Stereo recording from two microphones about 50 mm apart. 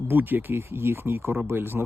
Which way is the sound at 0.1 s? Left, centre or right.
Right.